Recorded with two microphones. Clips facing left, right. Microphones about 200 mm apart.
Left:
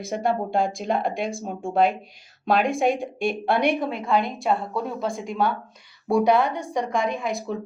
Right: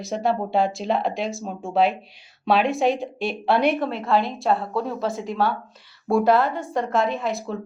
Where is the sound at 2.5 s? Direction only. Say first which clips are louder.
Even; 50° left (ahead or behind).